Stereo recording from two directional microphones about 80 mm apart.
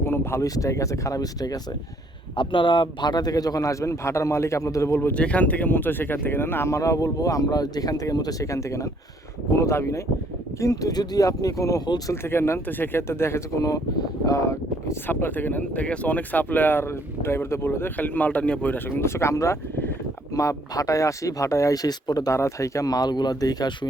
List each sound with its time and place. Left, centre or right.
0.0 s a sound: left
0.4 s a man's voice: left
2.3 s a man's voice: left
4.9 s speech: centre
6.7 s a man's voice: left
12.1 s speech: left
13.6 s a man's voice: left
15.0 s a man's voice: left
22.3 s a man's voice: left